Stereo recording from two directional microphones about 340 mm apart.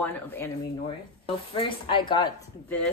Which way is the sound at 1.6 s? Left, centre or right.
Centre.